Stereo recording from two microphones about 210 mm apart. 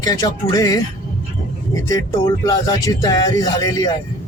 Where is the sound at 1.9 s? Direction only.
15° left (ahead or behind).